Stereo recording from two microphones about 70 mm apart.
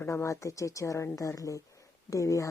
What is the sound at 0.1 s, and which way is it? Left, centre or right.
A woman's voice, left.